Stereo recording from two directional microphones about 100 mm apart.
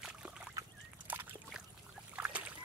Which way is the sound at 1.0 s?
20° right (ahead or behind).